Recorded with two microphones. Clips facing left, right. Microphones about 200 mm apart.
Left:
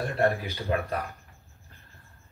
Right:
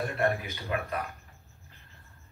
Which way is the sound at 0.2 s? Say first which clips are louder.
Left 5 dB; 30° left (ahead or behind).